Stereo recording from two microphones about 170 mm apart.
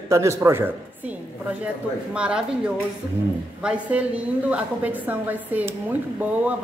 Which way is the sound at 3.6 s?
5° right (ahead or behind).